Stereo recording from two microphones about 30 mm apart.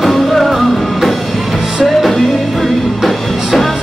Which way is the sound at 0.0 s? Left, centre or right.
Centre.